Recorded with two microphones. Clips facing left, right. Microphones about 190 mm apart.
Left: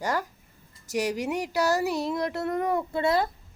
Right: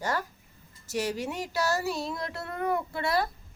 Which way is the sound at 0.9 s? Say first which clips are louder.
Left 3 dB; 15° left (ahead or behind).